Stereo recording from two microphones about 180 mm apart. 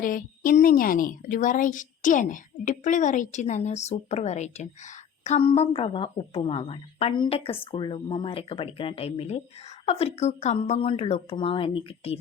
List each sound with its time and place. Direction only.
0.0 s a woman's voice: 50° left (ahead or behind)
5.4 s a woman's voice: 30° left (ahead or behind)